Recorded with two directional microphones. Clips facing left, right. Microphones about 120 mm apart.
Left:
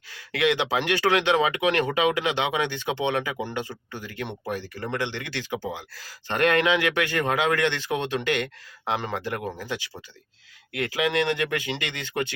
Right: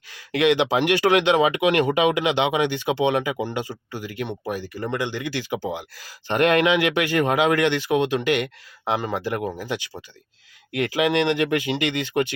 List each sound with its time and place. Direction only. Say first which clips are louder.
0.1 s speech: right 4 dB; 20° right (ahead or behind)